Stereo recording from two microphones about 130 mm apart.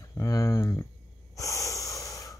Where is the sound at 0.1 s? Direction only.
20° left (ahead or behind).